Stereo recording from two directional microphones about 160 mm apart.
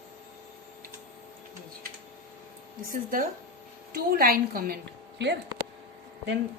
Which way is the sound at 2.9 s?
55° right (ahead or behind).